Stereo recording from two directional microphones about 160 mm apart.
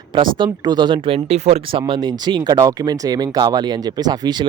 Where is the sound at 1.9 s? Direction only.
25° right (ahead or behind).